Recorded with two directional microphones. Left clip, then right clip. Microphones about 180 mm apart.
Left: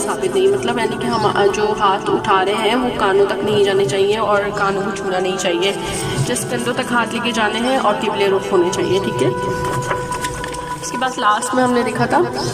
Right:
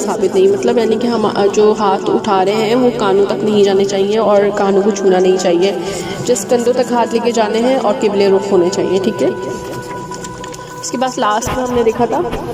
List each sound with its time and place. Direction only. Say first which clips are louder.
0.1 s a woman's voice: right 4 dB; 30° right (ahead or behind)
11.0 s a woman's voice: right 1 dB; 30° right (ahead or behind)